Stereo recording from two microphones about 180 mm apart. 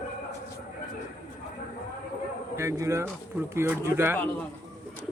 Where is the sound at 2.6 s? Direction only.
15° right (ahead or behind).